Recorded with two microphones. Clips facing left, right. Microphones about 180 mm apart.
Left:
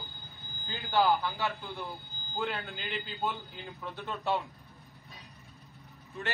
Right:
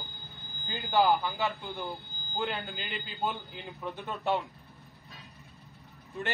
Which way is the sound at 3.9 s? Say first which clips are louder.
Right 1 dB; 15° right (ahead or behind).